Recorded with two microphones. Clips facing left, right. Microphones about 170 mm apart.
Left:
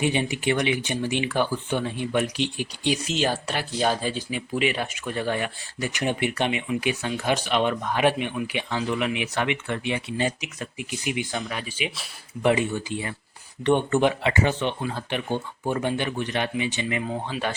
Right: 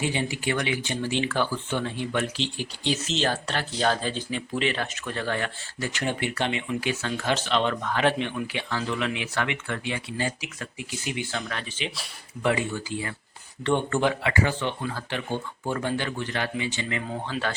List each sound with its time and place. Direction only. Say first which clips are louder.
0.0 s speech: left 3 dB; 20° left (ahead or behind)